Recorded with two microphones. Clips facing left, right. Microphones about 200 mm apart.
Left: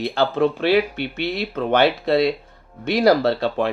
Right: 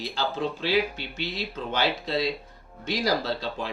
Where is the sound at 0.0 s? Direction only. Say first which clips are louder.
Left 10 dB; 65° left (ahead or behind).